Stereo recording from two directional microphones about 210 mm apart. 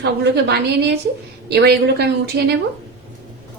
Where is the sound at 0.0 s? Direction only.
50° right (ahead or behind).